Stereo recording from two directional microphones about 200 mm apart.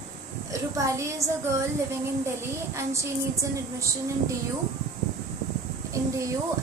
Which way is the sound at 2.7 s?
15° right (ahead or behind).